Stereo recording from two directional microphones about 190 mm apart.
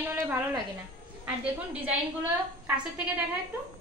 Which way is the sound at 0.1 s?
15° right (ahead or behind).